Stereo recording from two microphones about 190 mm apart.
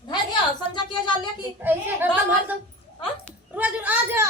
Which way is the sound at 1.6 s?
10° right (ahead or behind).